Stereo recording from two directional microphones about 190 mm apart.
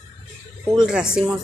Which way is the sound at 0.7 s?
5° right (ahead or behind).